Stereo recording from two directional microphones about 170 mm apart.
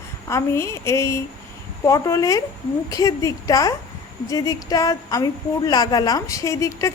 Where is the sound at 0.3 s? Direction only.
15° left (ahead or behind).